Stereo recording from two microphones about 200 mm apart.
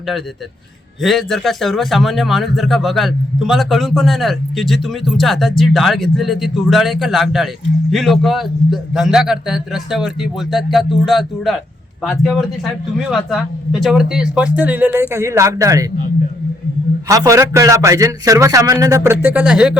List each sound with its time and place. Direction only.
1.0 s speech: centre (ahead or behind); by 15.9 s 15° right (ahead or behind)
17.1 s speech: 15° right (ahead or behind)